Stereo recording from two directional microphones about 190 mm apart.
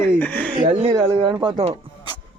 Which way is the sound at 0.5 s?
35° right (ahead or behind).